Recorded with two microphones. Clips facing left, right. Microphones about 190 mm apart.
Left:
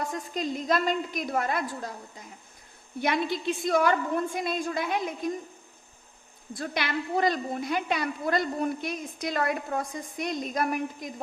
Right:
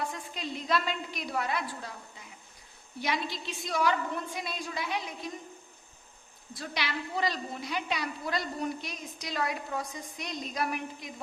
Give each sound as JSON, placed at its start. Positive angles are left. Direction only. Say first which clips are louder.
{"t": 0.0, "sound": "a woman's voice", "louder": "left 5 dB", "side_deg": 45}
{"t": 6.5, "sound": "a woman's voice", "louder": "left 5 dB", "side_deg": 50}